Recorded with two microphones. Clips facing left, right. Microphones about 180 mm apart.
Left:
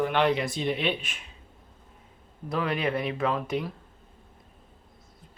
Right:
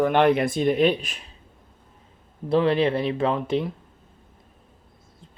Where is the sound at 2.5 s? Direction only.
30° right (ahead or behind).